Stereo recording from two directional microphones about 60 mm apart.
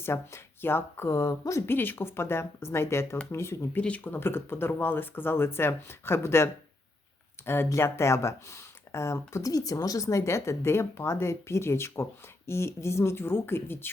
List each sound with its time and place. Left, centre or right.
0.0 s speech: left
1.6 s speech: left
3.8 s speech: left